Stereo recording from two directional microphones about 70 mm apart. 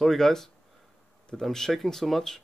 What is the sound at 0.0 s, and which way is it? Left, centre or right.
Speech, centre.